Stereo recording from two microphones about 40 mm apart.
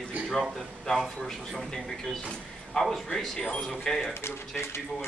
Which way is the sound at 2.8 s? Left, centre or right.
Left.